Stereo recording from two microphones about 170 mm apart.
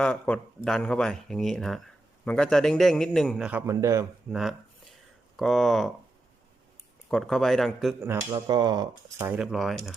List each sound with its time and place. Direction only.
0.0 s speech: 5° left (ahead or behind)
3.7 s speech: 15° right (ahead or behind)
4.3 s a sound: centre (ahead or behind)
5.4 s speech: centre (ahead or behind)
7.1 s speech: centre (ahead or behind)
8.0 s speech: 15° right (ahead or behind)
8.4 s speech: 25° right (ahead or behind); by 9.9 s centre (ahead or behind)